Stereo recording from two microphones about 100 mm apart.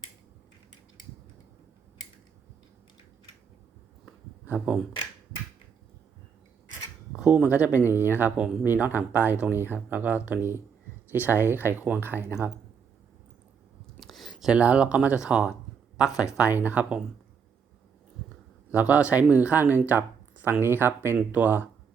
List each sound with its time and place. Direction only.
4.4 s speech: 15° right (ahead or behind)
7.2 s speech: 5° right (ahead or behind)
7.4 s speech: 15° right (ahead or behind)
14.0 s speech: centre (ahead or behind)
16.0 s speech: 35° left (ahead or behind)
16.4 s speech: 20° right (ahead or behind)
18.7 s speech: 15° right (ahead or behind)